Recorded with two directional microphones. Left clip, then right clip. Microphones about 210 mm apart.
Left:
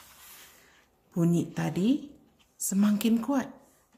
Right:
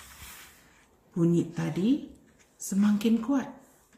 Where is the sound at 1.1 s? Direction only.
55° left (ahead or behind).